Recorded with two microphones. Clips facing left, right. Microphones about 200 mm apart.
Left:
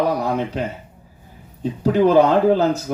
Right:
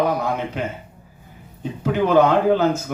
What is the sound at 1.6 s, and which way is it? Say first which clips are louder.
Speech: left 5 dB; 35° left (ahead or behind).